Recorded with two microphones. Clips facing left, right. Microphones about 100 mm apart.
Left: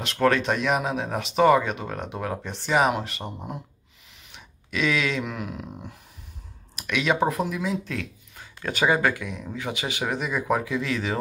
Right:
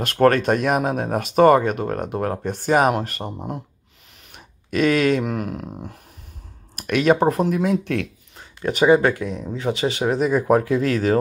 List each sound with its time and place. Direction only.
0.0 s speech: 50° right (ahead or behind)
4.3 s speech: 50° right (ahead or behind); by 8.1 s 65° right (ahead or behind)
8.4 s speech: 20° right (ahead or behind)
9.0 s speech: 35° right (ahead or behind)